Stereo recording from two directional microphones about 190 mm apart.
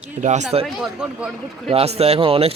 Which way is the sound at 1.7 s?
30° right (ahead or behind).